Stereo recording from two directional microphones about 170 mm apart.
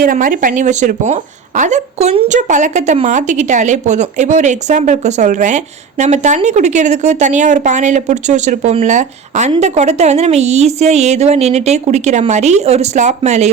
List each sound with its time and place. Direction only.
0.0 s a woman's voice: 50° right (ahead or behind)